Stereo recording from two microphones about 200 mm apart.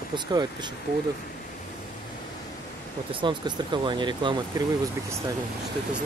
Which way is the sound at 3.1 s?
25° right (ahead or behind).